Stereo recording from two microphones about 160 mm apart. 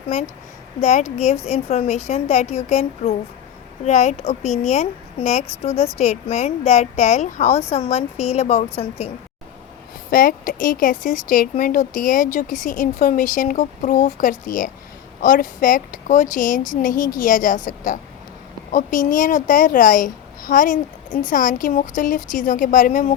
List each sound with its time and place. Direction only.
0.8 s a woman's voice: 50° left (ahead or behind)
10.1 s speech: 60° left (ahead or behind)